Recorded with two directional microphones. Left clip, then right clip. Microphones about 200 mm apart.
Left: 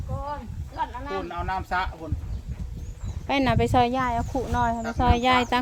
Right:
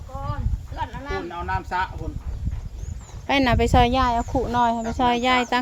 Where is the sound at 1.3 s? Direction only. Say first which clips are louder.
Right 1 dB; 30° left (ahead or behind).